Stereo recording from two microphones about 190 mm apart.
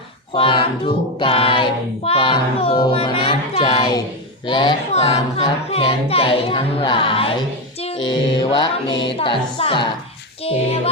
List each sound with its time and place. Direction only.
0.3 s speech: 25° left (ahead or behind)
10.5 s music: 30° left (ahead or behind)